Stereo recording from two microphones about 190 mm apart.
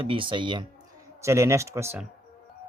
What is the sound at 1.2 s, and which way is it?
Speech, 15° right (ahead or behind).